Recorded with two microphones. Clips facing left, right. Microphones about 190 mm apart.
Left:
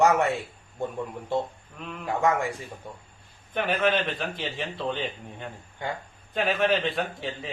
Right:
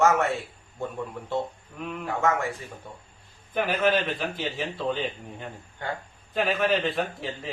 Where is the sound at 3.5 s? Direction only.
5° right (ahead or behind).